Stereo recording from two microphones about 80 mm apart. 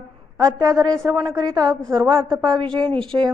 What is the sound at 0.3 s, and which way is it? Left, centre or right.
A woman's voice, right.